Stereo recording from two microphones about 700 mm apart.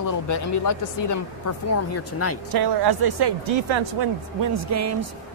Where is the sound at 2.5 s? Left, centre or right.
Right.